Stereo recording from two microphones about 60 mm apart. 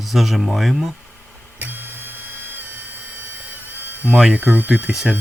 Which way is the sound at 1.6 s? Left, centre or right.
Right.